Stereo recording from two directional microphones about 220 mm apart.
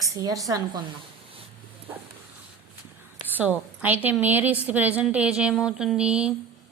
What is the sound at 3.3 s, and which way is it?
A woman's voice, 10° right (ahead or behind).